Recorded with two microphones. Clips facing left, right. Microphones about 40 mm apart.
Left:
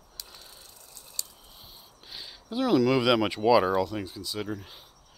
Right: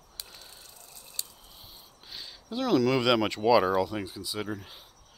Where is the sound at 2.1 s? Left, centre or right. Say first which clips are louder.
Left 1 dB; centre.